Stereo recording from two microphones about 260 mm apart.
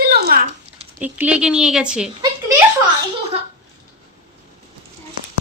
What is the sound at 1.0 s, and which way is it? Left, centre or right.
Speech, centre.